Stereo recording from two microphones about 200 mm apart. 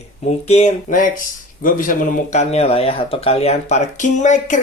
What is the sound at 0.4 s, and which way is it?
Speech, 35° left (ahead or behind).